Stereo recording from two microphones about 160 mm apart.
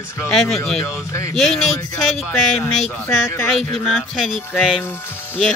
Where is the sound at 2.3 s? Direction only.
15° left (ahead or behind).